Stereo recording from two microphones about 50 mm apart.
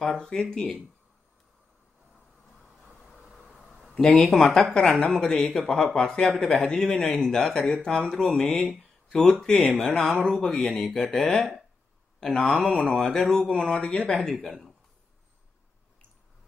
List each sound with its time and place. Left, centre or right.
0.2 s speech: centre
2.8 s vehicle: centre
3.6 s a sound: centre
3.9 s speech: centre
14.3 s speech: centre